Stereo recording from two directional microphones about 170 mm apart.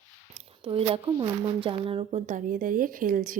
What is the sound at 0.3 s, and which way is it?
Speech, 35° right (ahead or behind).